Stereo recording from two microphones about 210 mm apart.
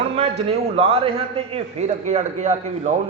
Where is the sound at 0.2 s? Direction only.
25° right (ahead or behind).